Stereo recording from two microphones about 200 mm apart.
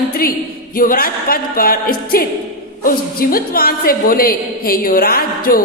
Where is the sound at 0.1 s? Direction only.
45° left (ahead or behind).